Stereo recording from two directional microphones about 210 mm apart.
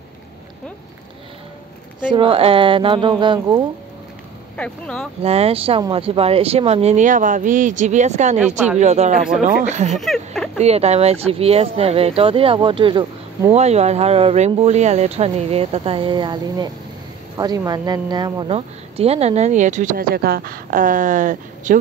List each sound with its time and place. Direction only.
2.0 s speech: 20° right (ahead or behind)
4.6 s speech: 5° left (ahead or behind)
5.2 s a woman's voice: 30° right (ahead or behind)
9.9 s a sound: centre (ahead or behind)
10.6 s a woman's voice: 30° right (ahead or behind)